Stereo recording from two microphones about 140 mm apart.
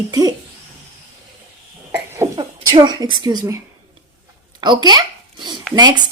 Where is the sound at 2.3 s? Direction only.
30° right (ahead or behind).